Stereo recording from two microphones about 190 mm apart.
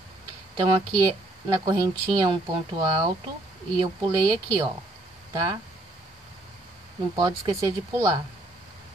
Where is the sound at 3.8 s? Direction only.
20° right (ahead or behind).